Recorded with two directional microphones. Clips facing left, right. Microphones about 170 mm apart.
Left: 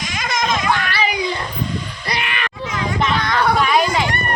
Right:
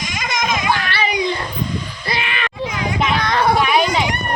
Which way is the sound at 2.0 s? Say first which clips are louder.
Right 1 dB; 30° right (ahead or behind).